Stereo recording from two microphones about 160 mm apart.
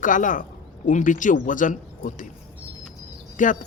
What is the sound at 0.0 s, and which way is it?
Speech, 55° left (ahead or behind).